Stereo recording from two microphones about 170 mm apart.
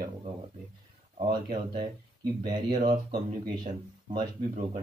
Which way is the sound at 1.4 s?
55° right (ahead or behind).